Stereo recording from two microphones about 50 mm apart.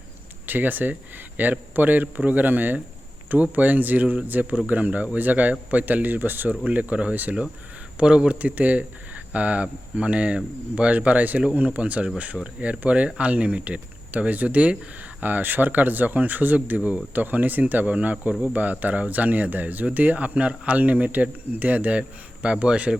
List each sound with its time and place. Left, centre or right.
0.4 s speech: right
6.7 s speech: right
7.9 s speech: centre
8.4 s speech: right
15.2 s speech: right